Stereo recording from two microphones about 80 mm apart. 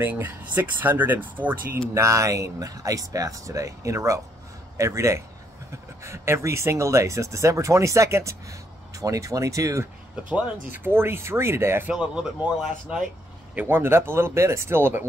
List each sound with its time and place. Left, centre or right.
0.0 s speech: right
1.7 s speech: right
10.3 s speech: right
11.9 s speech: centre
13.6 s speech: right